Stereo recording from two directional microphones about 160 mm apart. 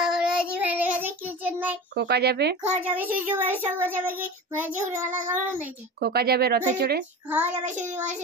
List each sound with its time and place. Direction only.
0.0 s child singing: 5° right (ahead or behind)
2.0 s speech: 90° right
2.8 s speech: 10° right (ahead or behind)
5.9 s speech: 85° right
6.8 s speech: 90° right
7.2 s speech: 10° right (ahead or behind)
7.9 s child singing: 45° right (ahead or behind)